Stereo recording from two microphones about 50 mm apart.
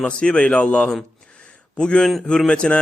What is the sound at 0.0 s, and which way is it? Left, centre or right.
Speech, centre.